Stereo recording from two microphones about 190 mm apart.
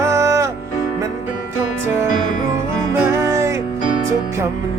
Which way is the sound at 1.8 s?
15° right (ahead or behind).